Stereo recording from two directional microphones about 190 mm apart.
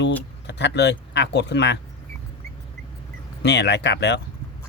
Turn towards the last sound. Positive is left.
turn(degrees=65)  # may be behind; listen again after turning